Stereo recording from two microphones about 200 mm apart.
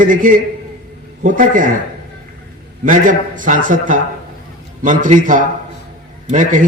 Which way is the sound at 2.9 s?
40° right (ahead or behind).